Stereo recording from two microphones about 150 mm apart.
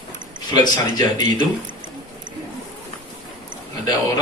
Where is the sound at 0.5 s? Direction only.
25° left (ahead or behind).